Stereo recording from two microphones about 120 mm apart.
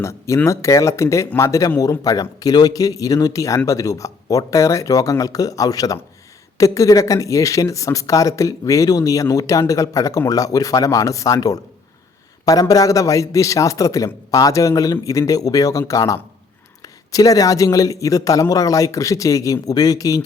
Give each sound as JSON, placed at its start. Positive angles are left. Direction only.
{"t": 0.0, "sound": "speech", "side_deg": 25}